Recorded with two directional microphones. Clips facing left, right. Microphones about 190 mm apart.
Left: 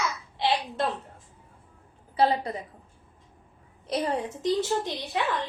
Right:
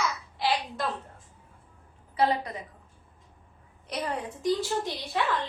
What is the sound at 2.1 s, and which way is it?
Speech, 30° left (ahead or behind).